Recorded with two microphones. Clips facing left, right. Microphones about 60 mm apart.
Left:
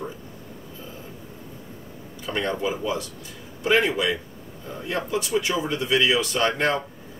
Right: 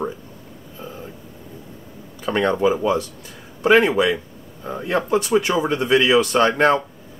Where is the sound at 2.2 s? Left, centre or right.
Right.